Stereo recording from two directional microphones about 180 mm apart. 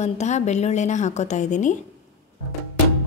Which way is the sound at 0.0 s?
40° left (ahead or behind).